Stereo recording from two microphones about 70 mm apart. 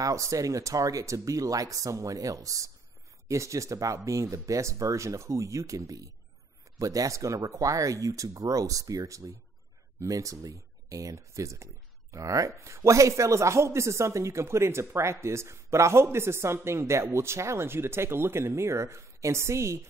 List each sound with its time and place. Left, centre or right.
0.0 s speech: right